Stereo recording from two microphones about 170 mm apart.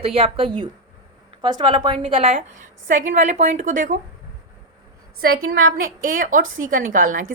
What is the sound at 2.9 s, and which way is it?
A woman's voice, 50° right (ahead or behind).